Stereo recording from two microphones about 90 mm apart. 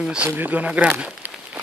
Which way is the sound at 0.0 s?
10° right (ahead or behind).